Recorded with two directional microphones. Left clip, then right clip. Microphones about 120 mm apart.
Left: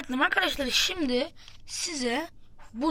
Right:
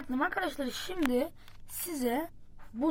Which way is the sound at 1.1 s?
20° right (ahead or behind).